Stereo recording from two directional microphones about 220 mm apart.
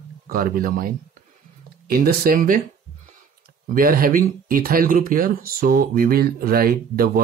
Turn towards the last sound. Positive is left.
turn(degrees=-40)  # may be behind; listen again after turning